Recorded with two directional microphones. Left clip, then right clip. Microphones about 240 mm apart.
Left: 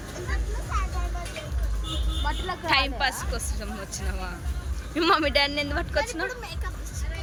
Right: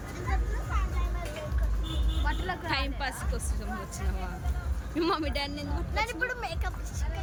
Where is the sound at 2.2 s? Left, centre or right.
Centre.